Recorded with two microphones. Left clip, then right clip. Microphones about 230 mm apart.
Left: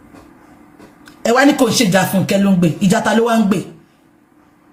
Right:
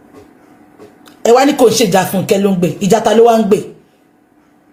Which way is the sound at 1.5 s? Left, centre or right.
Left.